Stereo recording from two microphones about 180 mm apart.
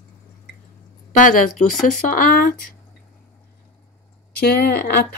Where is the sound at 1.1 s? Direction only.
45° left (ahead or behind).